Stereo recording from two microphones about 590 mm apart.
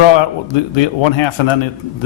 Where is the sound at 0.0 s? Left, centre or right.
Left.